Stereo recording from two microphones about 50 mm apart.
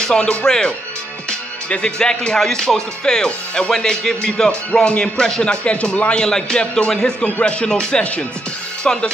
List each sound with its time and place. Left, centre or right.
0.0 s speech: centre
7.2 s speech: left
7.6 s speech: centre